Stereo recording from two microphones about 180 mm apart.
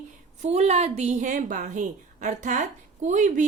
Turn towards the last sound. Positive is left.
turn(degrees=-45)  # may be behind; listen again after turning